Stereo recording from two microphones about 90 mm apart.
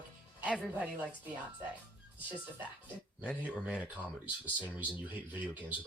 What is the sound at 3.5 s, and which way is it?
Speech, 15° right (ahead or behind).